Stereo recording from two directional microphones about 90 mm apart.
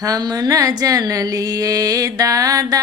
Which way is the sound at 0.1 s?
40° right (ahead or behind).